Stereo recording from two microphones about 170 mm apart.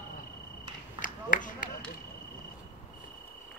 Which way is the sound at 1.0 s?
50° left (ahead or behind).